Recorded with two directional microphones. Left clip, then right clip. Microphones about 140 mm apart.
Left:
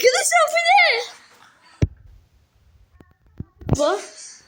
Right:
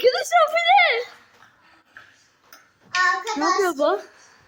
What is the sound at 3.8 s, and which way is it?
Speech, 5° right (ahead or behind).